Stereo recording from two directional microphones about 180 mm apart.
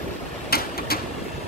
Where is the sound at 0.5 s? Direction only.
60° left (ahead or behind).